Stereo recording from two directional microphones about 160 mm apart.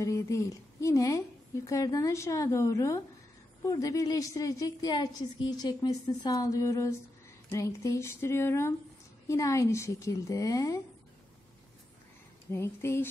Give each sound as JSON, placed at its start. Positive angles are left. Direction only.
{"t": 0.0, "sound": "a woman's voice", "side_deg": 20}
{"t": 12.5, "sound": "speech", "side_deg": 15}